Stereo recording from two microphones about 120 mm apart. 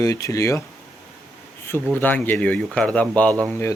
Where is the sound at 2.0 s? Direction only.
15° left (ahead or behind).